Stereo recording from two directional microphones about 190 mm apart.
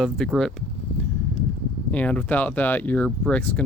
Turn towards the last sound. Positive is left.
turn(degrees=5)  # may be behind; listen again after turning